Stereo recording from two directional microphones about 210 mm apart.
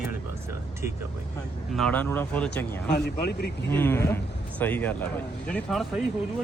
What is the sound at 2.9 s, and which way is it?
Speech, 50° left (ahead or behind).